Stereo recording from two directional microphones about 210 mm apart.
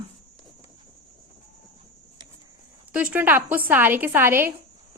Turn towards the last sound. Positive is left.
turn(degrees=-10)  # may be behind; listen again after turning